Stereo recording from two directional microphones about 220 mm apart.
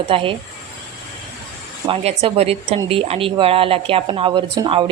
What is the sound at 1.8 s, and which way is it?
Speech, 25° right (ahead or behind).